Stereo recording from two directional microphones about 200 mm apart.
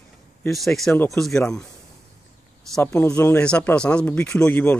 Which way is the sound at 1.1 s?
Centre (ahead or behind).